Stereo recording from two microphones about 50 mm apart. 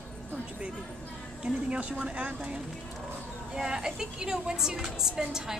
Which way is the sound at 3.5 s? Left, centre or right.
Centre.